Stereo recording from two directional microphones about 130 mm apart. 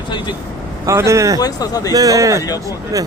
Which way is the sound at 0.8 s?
25° right (ahead or behind).